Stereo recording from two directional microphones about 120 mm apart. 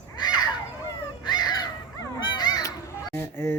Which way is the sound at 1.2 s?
35° left (ahead or behind).